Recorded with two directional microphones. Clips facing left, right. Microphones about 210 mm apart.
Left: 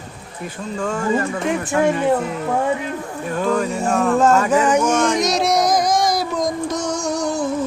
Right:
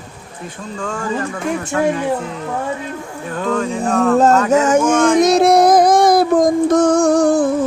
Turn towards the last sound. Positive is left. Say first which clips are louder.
# right 9 dB
turn(degrees=-55)  # may be behind; listen again after turning